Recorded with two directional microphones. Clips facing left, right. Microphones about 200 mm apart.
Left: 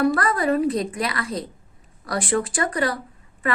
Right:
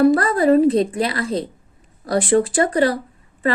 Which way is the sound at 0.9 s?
30° right (ahead or behind).